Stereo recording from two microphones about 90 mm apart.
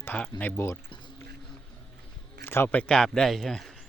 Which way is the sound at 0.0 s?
20° left (ahead or behind).